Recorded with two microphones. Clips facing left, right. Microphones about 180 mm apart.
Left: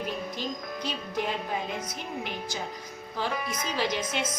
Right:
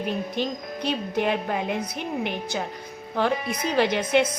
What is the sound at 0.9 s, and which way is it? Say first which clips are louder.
A woman's voice: right 8 dB; 65° right (ahead or behind).